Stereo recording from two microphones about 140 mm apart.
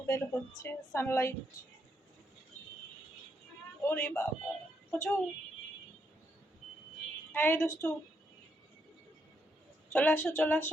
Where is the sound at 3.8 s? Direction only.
15° left (ahead or behind).